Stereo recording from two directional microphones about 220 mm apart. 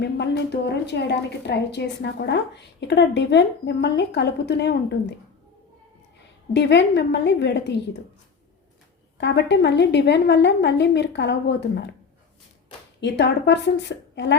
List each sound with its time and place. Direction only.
0.0 s a woman's voice: 50° left (ahead or behind)
6.5 s a woman's voice: 50° left (ahead or behind)
9.1 s a woman's voice: 50° left (ahead or behind)
13.0 s a woman's voice: 50° left (ahead or behind)